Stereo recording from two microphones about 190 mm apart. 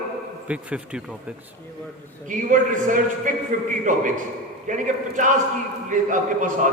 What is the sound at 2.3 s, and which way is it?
A man's voice, 45° right (ahead or behind).